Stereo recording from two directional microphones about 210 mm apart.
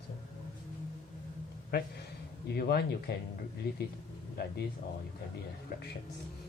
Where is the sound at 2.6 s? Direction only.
50° left (ahead or behind).